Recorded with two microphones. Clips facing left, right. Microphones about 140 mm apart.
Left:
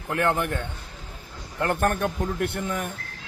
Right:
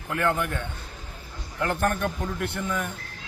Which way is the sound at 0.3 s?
50° left (ahead or behind).